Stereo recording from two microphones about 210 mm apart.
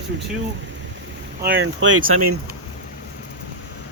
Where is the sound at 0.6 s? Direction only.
60° right (ahead or behind); by 2.4 s 85° right.